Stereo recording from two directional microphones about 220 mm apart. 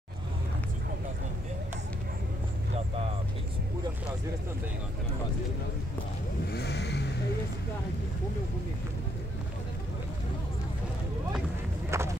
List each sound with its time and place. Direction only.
6.5 s vehicle: 50° left (ahead or behind)
11.9 s run: 10° right (ahead or behind)